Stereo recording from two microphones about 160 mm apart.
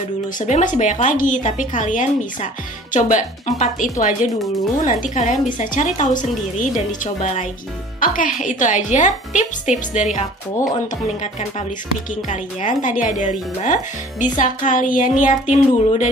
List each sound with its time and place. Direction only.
0.4 s a woman's voice: 50° left (ahead or behind)
12.3 s a woman's voice: 50° left (ahead or behind)